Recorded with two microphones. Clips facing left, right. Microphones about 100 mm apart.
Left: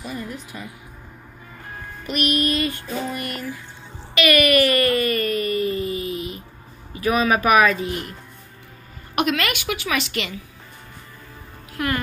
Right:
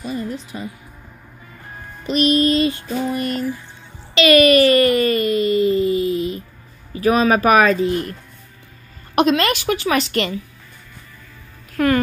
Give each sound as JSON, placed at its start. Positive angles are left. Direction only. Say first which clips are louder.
{"t": 0.0, "sound": "music", "louder": "right 5 dB", "side_deg": -20}
{"t": 2.0, "sound": "music", "louder": "right 6 dB", "side_deg": -25}
{"t": 4.1, "sound": "a sound", "louder": "right 5 dB", "side_deg": -25}
{"t": 6.9, "sound": "a woman's voice", "louder": "right 4 dB", "side_deg": -35}
{"t": 9.1, "sound": "a woman's voice", "louder": "right 6 dB", "side_deg": -30}